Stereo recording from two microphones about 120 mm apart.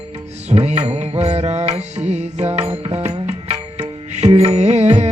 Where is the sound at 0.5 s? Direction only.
65° right (ahead or behind).